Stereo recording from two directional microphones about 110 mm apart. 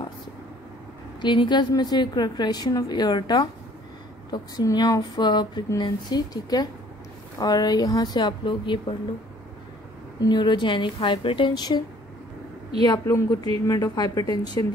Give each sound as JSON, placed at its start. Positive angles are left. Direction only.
{"t": 1.2, "sound": "a woman's voice", "side_deg": 45}
{"t": 10.2, "sound": "a woman's voice", "side_deg": 45}
{"t": 13.0, "sound": "a woman's voice", "side_deg": 30}